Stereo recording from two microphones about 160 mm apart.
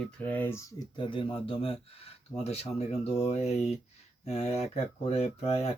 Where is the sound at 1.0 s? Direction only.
30° left (ahead or behind).